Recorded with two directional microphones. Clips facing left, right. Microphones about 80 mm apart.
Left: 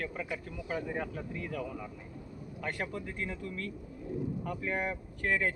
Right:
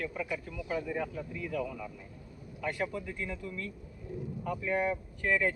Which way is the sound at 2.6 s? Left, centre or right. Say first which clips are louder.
Right 3 dB; left.